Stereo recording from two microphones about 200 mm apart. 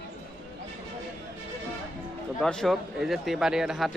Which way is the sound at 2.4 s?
5° left (ahead or behind).